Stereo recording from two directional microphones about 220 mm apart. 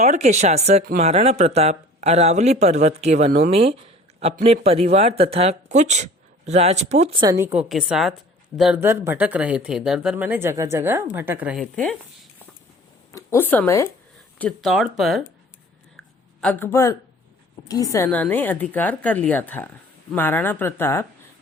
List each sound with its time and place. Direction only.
0.0 s speech: 30° right (ahead or behind); by 11.9 s 5° left (ahead or behind)
13.1 s speech: 15° left (ahead or behind)
16.4 s a woman's voice: 10° left (ahead or behind)